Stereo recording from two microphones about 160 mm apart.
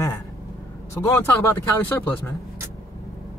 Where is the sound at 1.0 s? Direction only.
15° left (ahead or behind).